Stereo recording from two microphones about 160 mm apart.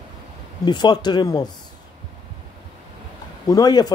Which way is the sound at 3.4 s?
25° left (ahead or behind).